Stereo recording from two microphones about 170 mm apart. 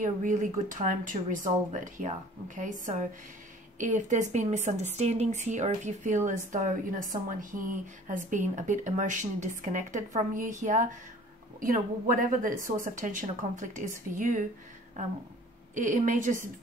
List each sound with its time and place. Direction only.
0.0 s speech: 50° right (ahead or behind)
15.7 s speech: 50° right (ahead or behind)